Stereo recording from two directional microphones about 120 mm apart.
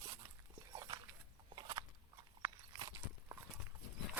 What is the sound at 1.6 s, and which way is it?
Biting, 40° right (ahead or behind).